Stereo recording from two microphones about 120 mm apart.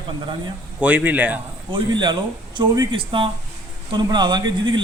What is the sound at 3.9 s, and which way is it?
Speech, 35° right (ahead or behind).